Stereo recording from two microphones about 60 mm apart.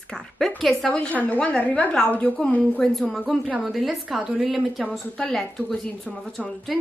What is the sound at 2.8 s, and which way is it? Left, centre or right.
A woman's voice, centre.